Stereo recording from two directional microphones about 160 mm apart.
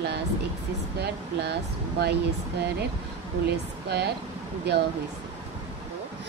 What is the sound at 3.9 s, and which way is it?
Speech, 90° right.